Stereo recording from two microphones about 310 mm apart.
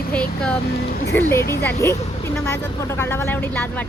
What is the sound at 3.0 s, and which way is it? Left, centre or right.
Speech, centre.